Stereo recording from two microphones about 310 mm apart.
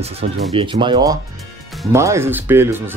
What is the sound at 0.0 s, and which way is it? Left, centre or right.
Speech, centre.